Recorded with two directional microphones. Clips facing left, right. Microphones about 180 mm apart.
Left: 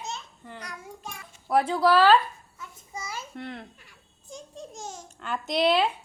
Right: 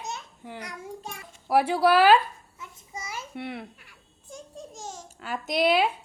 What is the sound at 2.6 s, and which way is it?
Child singing, 20° right (ahead or behind).